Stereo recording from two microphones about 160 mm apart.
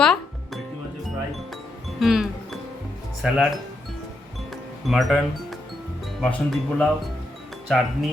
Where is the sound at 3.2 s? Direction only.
5° right (ahead or behind).